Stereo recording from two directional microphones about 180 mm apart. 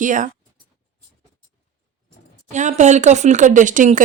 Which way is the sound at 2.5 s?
40° right (ahead or behind).